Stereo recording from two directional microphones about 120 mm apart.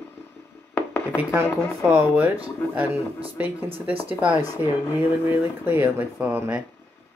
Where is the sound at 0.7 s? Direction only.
15° left (ahead or behind).